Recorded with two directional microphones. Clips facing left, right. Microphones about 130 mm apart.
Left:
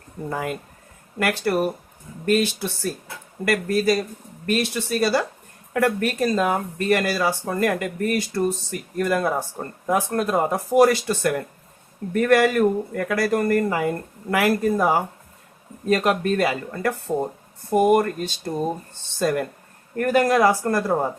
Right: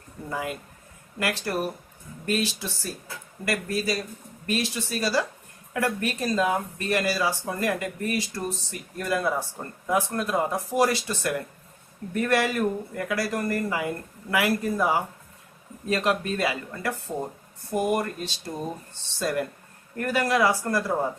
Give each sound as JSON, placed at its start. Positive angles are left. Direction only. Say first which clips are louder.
{"t": 0.3, "sound": "speech", "louder": "left 4 dB", "side_deg": 50}